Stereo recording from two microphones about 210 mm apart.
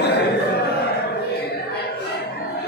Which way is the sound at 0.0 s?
50° left (ahead or behind).